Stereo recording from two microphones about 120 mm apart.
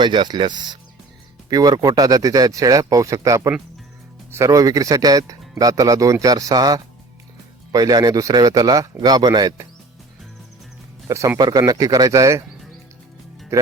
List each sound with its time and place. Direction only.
0.0 s speech: 40° right (ahead or behind)
11.1 s speech: 25° right (ahead or behind)
13.5 s speech: 25° right (ahead or behind)